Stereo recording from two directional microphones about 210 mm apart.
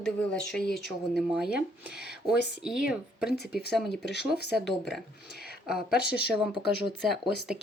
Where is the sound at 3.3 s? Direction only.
50° left (ahead or behind).